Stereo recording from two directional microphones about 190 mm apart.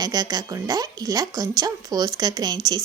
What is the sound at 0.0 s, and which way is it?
A woman's voice, 20° right (ahead or behind).